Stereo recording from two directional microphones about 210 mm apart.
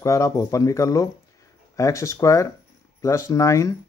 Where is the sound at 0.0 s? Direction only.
15° left (ahead or behind).